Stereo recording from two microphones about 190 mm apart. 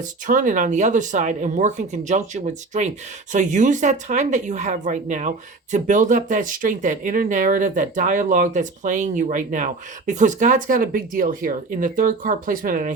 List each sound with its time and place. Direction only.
0.0 s speech: 45° right (ahead or behind)